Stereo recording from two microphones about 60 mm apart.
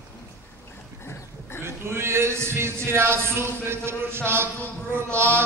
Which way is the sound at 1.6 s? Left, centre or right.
Right.